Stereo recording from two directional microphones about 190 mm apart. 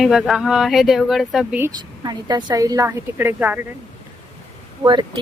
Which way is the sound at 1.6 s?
20° right (ahead or behind).